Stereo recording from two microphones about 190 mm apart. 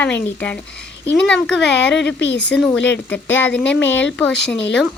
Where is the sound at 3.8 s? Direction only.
75° left (ahead or behind).